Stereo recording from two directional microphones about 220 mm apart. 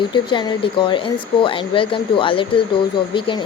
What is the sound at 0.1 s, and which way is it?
Speech, 20° left (ahead or behind).